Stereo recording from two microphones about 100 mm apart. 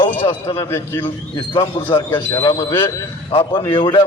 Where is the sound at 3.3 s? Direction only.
65° left (ahead or behind).